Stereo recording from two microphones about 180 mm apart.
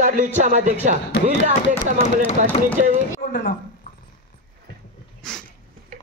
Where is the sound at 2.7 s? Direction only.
45° right (ahead or behind).